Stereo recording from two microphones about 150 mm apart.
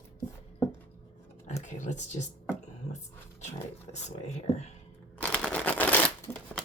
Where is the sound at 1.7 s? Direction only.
55° left (ahead or behind).